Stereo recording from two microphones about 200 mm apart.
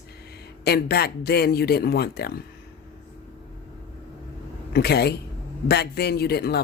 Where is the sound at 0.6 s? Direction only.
55° left (ahead or behind).